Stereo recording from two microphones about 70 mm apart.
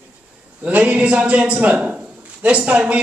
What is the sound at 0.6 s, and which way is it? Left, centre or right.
A man's voice, right.